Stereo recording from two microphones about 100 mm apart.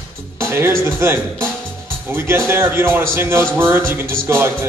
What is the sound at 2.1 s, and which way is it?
Music, 25° right (ahead or behind).